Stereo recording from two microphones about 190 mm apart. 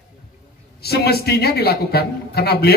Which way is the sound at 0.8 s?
55° left (ahead or behind).